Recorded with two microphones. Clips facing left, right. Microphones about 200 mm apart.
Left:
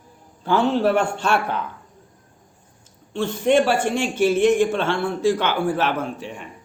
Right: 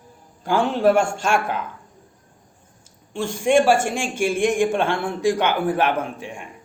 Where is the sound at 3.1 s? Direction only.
10° right (ahead or behind).